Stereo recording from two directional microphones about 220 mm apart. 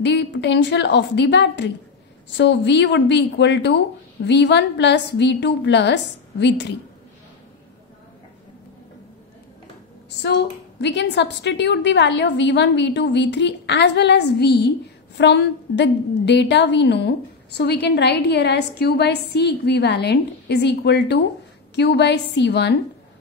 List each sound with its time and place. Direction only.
0.0 s a woman's voice: 50° left (ahead or behind)
10.2 s a woman's voice: 50° left (ahead or behind)